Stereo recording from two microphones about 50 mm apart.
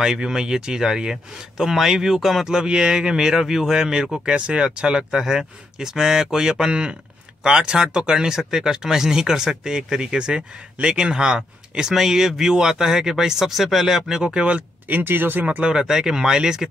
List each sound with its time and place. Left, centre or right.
0.0 s speech: centre
2.5 s speech: centre
14.9 s speech: right
15.4 s speech: right
15.7 s speech: centre